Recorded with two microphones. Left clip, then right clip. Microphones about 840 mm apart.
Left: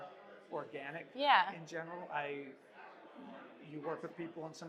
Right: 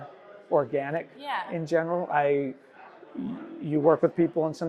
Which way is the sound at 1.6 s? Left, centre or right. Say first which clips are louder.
Right 19 dB; right.